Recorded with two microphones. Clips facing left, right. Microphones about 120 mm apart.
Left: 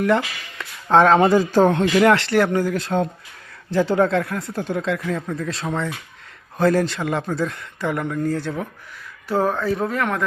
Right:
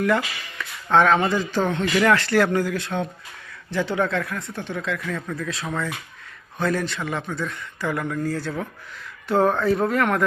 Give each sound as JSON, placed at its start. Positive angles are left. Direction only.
{"t": 0.0, "sound": "speech", "side_deg": 25}
{"t": 1.8, "sound": "speech", "side_deg": 25}
{"t": 3.7, "sound": "speech", "side_deg": 30}
{"t": 9.3, "sound": "speech", "side_deg": 5}